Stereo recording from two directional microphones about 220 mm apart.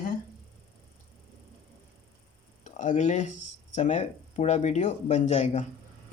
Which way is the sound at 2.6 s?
35° left (ahead or behind).